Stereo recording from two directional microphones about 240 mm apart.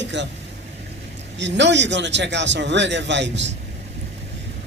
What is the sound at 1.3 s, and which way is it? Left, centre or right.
A man's voice, right.